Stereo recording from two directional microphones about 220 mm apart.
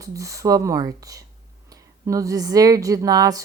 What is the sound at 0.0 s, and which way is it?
Speech, 15° right (ahead or behind).